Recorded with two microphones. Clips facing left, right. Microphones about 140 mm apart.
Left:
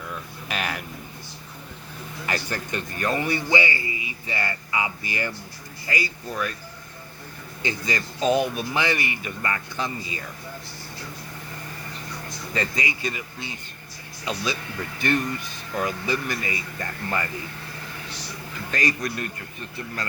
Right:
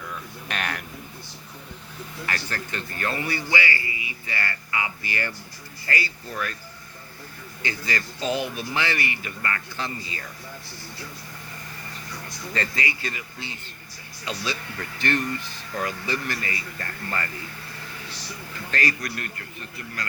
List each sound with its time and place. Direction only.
0.4 s a sound: 5° left (ahead or behind)
2.2 s a man's voice: 20° left (ahead or behind)
7.6 s a man's voice: 20° left (ahead or behind)
12.5 s speech: 15° left (ahead or behind)
14.9 s speech: 15° left (ahead or behind)
18.7 s a man's voice: 20° left (ahead or behind)